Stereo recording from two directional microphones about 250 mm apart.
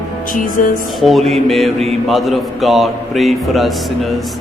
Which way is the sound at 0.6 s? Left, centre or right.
Left.